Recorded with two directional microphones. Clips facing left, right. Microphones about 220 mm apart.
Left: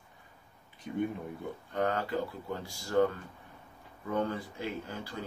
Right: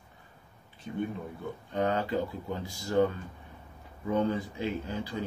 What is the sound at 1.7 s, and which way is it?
Speech, 20° right (ahead or behind).